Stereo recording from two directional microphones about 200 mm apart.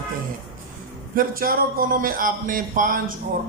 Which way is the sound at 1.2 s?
45° right (ahead or behind).